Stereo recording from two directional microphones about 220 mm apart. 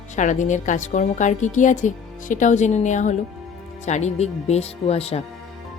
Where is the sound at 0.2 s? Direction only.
35° left (ahead or behind).